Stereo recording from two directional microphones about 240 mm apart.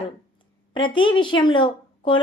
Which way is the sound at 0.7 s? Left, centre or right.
Centre.